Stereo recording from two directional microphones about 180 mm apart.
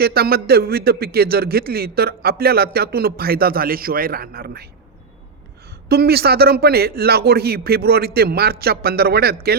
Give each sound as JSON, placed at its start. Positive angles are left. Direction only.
{"t": 0.0, "sound": "a man's voice", "side_deg": -60}
{"t": 5.9, "sound": "a man's voice", "side_deg": -60}